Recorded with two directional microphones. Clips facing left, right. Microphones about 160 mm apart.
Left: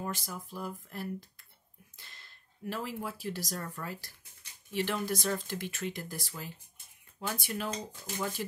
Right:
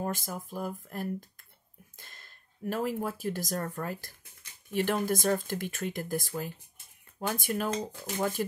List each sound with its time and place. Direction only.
0.0 s speech: 50° right (ahead or behind)